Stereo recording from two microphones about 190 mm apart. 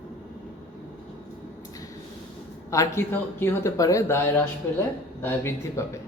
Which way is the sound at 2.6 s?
15° left (ahead or behind).